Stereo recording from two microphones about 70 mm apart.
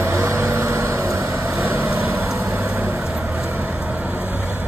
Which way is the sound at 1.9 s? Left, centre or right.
Right.